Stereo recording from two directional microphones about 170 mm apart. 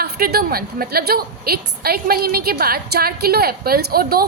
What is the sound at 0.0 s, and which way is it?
A woman's voice, 65° right (ahead or behind).